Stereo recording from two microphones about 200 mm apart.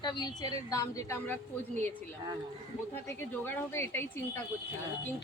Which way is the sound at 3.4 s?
10° left (ahead or behind).